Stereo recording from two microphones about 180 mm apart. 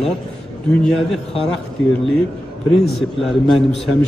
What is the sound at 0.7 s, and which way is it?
Speech, 5° left (ahead or behind).